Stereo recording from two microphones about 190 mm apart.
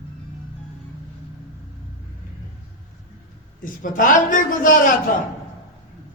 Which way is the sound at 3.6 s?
45° left (ahead or behind).